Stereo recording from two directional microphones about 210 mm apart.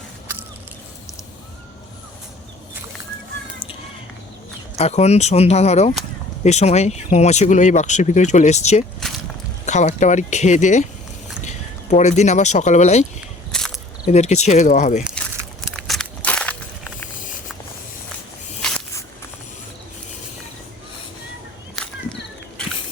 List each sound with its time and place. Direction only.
4.8 s speech: 30° left (ahead or behind)
9.0 s walk: centre (ahead or behind)
9.6 s speech: 35° left (ahead or behind)
13.5 s walk: 5° left (ahead or behind)
14.1 s speech: 30° left (ahead or behind)
15.9 s crushing: 5° left (ahead or behind)